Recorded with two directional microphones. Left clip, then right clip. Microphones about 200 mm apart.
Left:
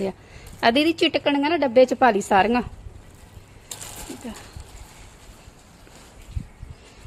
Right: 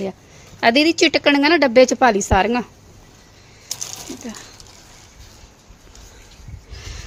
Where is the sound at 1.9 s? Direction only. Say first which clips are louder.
Right 2 dB; 20° right (ahead or behind).